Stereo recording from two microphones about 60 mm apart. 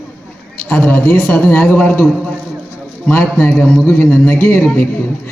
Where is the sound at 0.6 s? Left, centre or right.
Left.